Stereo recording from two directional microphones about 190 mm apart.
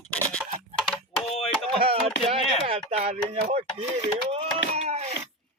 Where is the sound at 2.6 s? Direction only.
30° right (ahead or behind).